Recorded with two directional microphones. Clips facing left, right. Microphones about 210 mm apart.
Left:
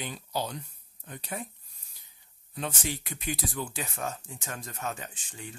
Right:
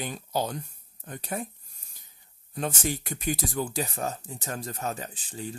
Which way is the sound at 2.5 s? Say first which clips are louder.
Right 4 dB; 45° right (ahead or behind).